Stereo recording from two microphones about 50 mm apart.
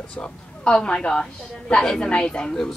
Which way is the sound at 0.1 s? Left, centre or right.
Centre.